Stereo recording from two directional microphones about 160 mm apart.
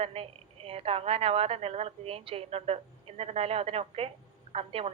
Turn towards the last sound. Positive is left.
turn(degrees=-40)  # may be behind; listen again after turning